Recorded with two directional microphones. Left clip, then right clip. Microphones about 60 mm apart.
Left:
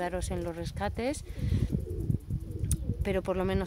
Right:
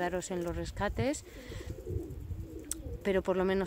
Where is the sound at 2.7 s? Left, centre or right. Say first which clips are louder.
Right 1 dB; left.